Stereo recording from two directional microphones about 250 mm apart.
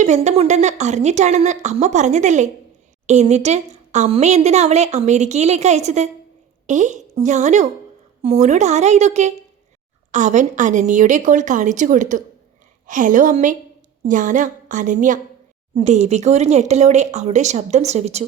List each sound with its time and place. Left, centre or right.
0.0 s a woman's voice: right